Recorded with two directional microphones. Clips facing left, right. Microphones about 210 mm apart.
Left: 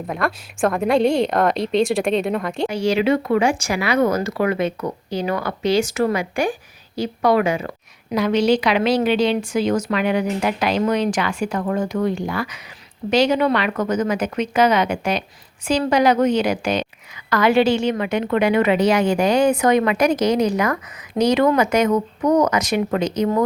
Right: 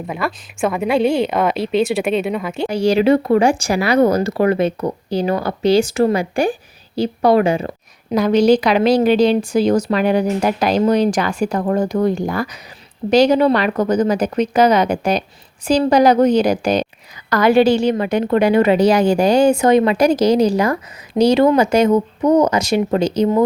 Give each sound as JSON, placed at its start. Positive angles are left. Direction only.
{"t": 0.1, "sound": "a woman's voice", "side_deg": 0}
{"t": 2.6, "sound": "a woman's voice", "side_deg": -35}